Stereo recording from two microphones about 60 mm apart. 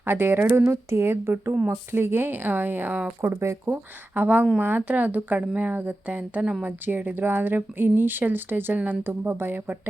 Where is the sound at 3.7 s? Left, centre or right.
Right.